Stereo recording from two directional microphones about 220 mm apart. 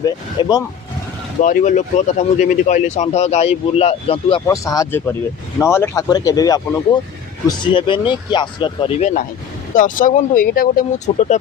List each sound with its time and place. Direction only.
0.4 s speech: 20° left (ahead or behind)
1.4 s speech: 35° left (ahead or behind)